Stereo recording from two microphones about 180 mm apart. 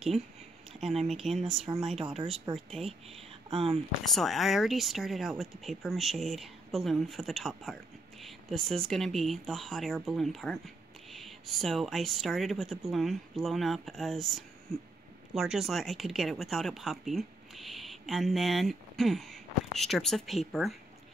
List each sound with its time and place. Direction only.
0.7 s speech: centre (ahead or behind)
3.4 s speech: 30° right (ahead or behind)
4.0 s speech: centre (ahead or behind)